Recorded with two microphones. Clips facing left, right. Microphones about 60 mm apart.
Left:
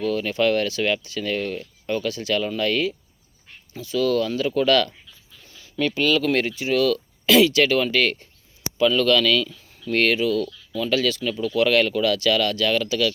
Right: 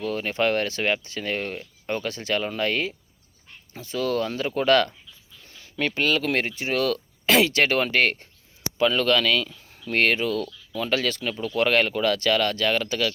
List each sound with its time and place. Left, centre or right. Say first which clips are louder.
0.0 s speech: left 3 dB; right
6.6 s speech: left 4 dB; right